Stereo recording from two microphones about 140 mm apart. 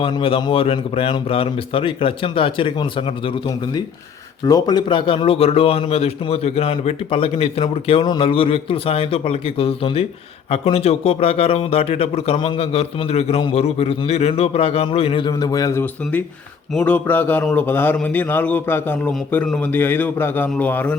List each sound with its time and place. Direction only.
0.0 s a man's voice: 40° left (ahead or behind)
4.4 s a man's voice: 30° left (ahead or behind)
16.7 s a man's voice: 10° left (ahead or behind)